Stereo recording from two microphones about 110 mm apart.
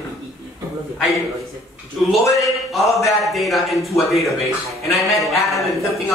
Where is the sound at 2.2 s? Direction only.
30° left (ahead or behind).